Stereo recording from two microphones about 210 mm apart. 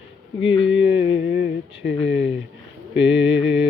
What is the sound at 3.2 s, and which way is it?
Mantra, 25° left (ahead or behind).